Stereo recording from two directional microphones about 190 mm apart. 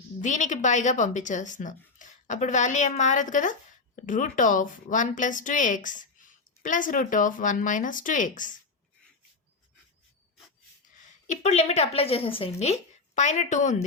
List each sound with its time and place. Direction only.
0.2 s a woman's voice: 40° left (ahead or behind)
11.3 s a woman's voice: 35° left (ahead or behind)